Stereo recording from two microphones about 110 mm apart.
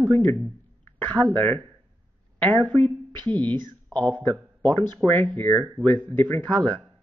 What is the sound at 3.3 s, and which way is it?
Speech, 15° left (ahead or behind).